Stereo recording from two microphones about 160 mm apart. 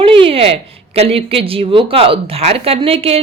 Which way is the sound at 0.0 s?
35° right (ahead or behind).